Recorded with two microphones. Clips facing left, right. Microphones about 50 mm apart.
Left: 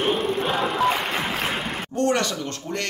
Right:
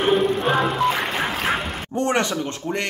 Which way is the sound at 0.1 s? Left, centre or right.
Centre.